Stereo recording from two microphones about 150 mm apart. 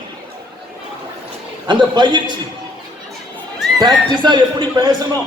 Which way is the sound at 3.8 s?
30° right (ahead or behind).